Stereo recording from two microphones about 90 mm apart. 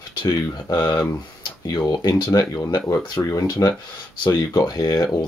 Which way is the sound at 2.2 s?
35° left (ahead or behind).